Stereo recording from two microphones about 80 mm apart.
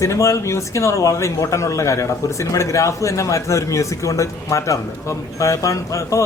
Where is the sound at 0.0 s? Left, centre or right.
Left.